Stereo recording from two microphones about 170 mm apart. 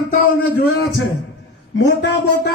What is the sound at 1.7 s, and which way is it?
Speech, 90° left.